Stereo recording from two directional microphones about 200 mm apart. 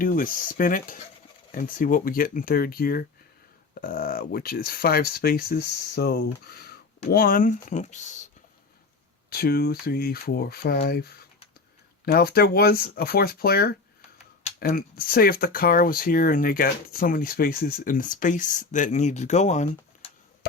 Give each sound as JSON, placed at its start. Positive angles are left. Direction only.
{"t": 0.0, "sound": "speech", "side_deg": 45}
{"t": 9.3, "sound": "speech", "side_deg": 50}